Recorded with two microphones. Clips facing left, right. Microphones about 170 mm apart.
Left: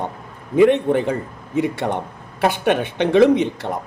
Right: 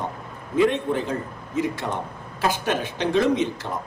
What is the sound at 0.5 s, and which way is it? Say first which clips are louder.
A woman's voice: left 7 dB; 65° left (ahead or behind).